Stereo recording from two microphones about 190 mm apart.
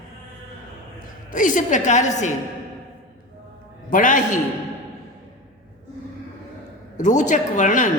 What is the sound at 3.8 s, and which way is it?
Speech, 45° left (ahead or behind).